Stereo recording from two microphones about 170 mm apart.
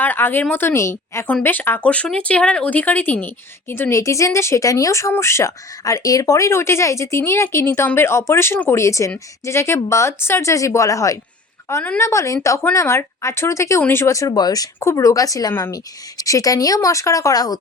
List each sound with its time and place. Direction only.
0.0 s speech: 10° left (ahead or behind)